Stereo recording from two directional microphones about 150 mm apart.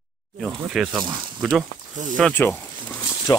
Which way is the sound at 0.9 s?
30° right (ahead or behind).